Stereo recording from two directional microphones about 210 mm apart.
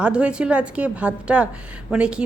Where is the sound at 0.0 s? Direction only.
5° right (ahead or behind).